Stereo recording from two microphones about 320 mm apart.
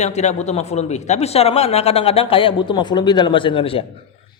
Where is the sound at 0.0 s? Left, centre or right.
Left.